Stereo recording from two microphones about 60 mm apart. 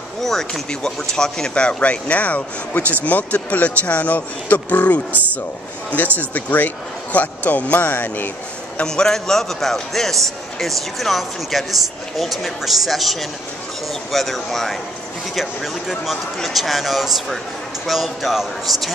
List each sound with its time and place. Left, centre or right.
0.2 s speech: centre; by 5.0 s left
6.1 s speech: left
8.8 s speech: centre